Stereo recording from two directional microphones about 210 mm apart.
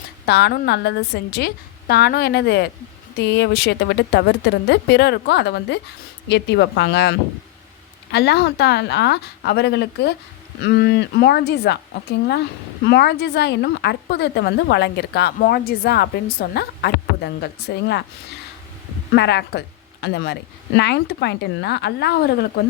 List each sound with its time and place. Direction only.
0.3 s speech: 50° left (ahead or behind)
19.1 s speech: 55° left (ahead or behind)